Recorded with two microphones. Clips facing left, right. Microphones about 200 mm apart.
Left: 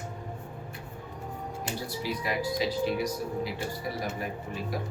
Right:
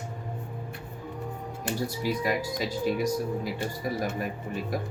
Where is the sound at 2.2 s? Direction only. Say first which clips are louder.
Right 1 dB; 45° right (ahead or behind).